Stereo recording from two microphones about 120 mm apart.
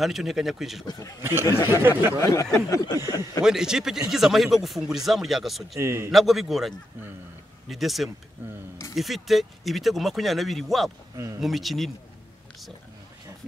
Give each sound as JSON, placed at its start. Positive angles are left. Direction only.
{"t": 0.0, "sound": "speech", "side_deg": 0}
{"t": 0.8, "sound": "a man's voice", "side_deg": 30}
{"t": 1.7, "sound": "speech", "side_deg": -20}
{"t": 2.1, "sound": "snicker", "side_deg": 25}
{"t": 3.4, "sound": "speech", "side_deg": -5}
{"t": 5.8, "sound": "a man's voice", "side_deg": -20}
{"t": 6.1, "sound": "speech", "side_deg": 0}